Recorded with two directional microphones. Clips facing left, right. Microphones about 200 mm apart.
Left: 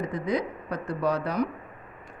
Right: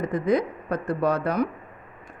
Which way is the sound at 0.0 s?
55° right (ahead or behind).